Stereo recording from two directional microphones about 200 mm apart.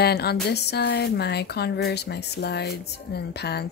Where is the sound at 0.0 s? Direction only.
55° left (ahead or behind).